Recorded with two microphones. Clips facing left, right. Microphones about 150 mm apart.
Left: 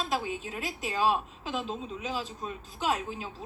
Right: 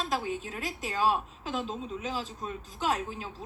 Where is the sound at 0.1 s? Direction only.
15° left (ahead or behind).